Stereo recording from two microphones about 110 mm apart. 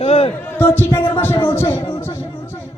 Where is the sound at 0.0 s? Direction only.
65° left (ahead or behind).